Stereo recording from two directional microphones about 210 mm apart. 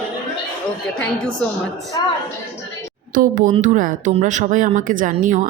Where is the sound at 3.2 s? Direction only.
40° right (ahead or behind).